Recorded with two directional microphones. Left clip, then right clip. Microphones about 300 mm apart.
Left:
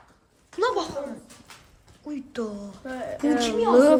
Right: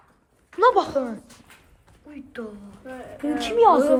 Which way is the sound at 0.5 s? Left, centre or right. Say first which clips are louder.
Right 7 dB; centre.